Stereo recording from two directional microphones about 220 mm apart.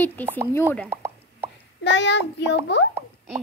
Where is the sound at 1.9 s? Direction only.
55° left (ahead or behind).